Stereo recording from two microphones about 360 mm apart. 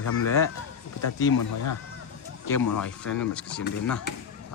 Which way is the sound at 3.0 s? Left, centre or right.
Centre.